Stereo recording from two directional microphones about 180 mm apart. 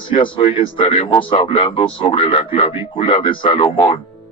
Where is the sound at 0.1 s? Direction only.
30° left (ahead or behind).